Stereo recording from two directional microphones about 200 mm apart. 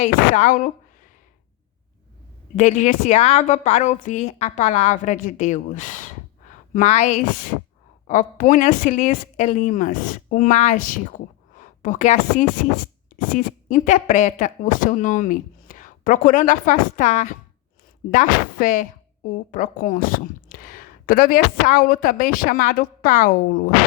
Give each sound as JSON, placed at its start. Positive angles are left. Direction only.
{"t": 0.0, "sound": "a woman's voice", "side_deg": 40}
{"t": 2.6, "sound": "a woman's voice", "side_deg": 40}